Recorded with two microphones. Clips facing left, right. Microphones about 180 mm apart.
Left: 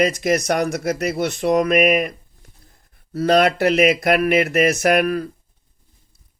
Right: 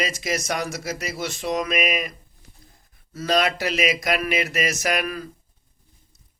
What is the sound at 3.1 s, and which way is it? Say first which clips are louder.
Speech: left 7 dB; 55° left (ahead or behind).